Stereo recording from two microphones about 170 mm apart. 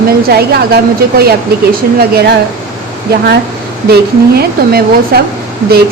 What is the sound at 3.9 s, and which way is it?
A woman's voice, 65° right (ahead or behind).